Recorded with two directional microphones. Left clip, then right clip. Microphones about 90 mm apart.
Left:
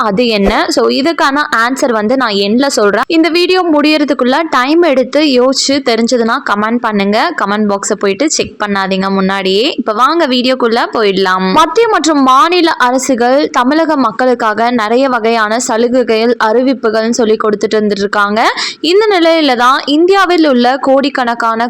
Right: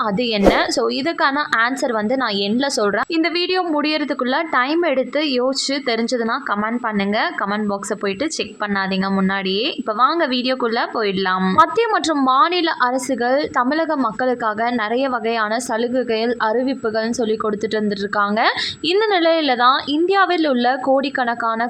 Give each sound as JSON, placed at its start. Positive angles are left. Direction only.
{"t": 0.2, "sound": "a woman's voice", "side_deg": 40}
{"t": 9.5, "sound": "a woman's voice", "side_deg": 30}